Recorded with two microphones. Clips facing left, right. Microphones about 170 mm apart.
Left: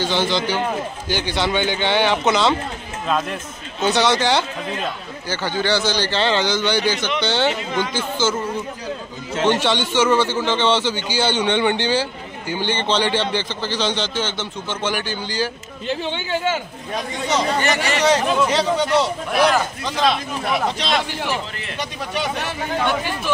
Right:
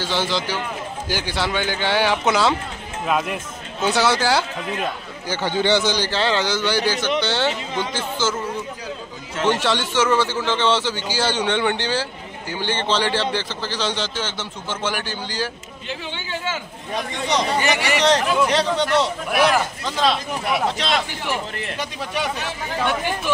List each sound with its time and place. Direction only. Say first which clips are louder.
0.0 s a man's voice: left 3 dB; 5° right (ahead or behind)
5.3 s a man's voice: right 2 dB; 20° right (ahead or behind)
6.0 s a man's voice: left 2 dB; 5° right (ahead or behind)
9.3 s a man's voice: left 2 dB; 30° left (ahead or behind)
9.6 s a man's voice: left 2 dB; centre (ahead or behind)
15.9 s speech: left 7 dB; 30° left (ahead or behind)
17.4 s speech: left 1 dB; 15° right (ahead or behind)
18.4 s a man's voice: left 1 dB; centre (ahead or behind)